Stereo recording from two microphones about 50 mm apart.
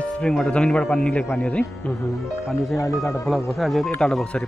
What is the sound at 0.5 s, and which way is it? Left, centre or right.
A man's voice, left.